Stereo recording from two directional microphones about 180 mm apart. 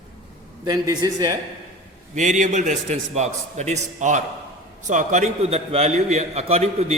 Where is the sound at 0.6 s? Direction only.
20° right (ahead or behind).